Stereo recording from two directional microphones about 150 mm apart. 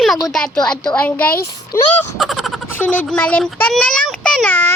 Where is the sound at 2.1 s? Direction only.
Centre (ahead or behind).